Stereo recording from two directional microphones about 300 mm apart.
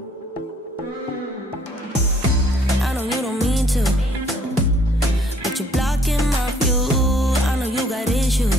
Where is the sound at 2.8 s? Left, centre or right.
Centre.